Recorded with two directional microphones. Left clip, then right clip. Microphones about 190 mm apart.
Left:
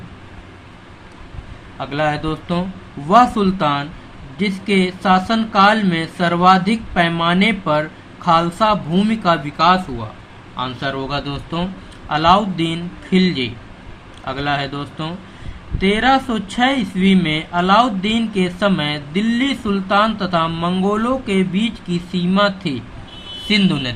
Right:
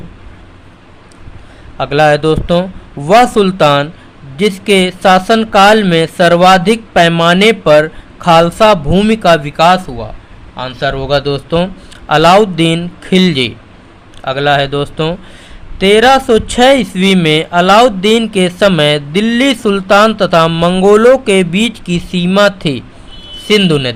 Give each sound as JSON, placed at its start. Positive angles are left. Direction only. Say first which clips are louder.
{"t": 1.8, "sound": "speech", "louder": "right 11 dB", "side_deg": -60}
{"t": 23.5, "sound": "a man's voice", "louder": "right 8 dB", "side_deg": -50}